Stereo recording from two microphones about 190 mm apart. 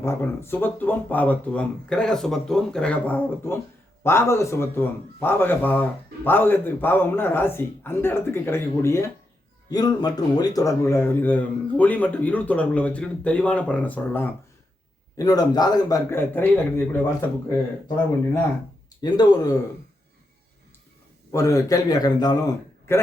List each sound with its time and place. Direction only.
0.0 s a man's voice: 15° left (ahead or behind)
19.0 s a man's voice: 20° left (ahead or behind)
21.3 s a man's voice: 20° left (ahead or behind)